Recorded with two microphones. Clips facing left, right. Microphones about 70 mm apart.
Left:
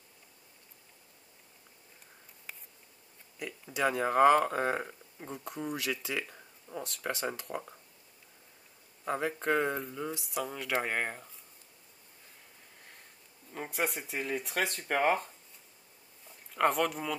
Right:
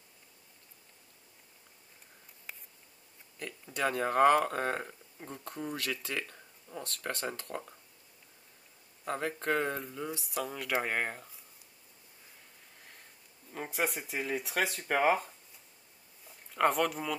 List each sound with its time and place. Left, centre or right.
3.3 s speech: centre
9.0 s speech: centre
13.5 s speech: centre